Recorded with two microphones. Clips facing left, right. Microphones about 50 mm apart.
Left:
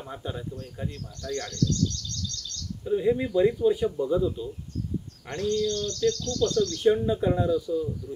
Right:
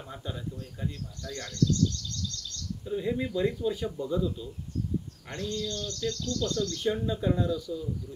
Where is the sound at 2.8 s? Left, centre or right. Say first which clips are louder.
Left 6 dB; centre.